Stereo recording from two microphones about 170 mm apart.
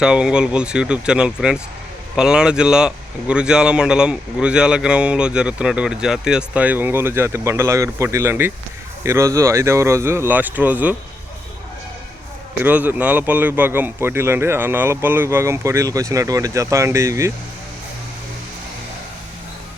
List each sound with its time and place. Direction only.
0.0 s a man's voice: 5° right (ahead or behind)
12.6 s a man's voice: 10° right (ahead or behind)